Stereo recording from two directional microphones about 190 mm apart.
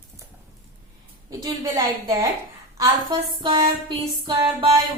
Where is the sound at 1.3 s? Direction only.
20° right (ahead or behind).